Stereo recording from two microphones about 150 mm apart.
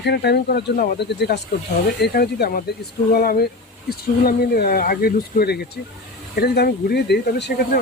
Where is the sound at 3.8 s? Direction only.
90° left.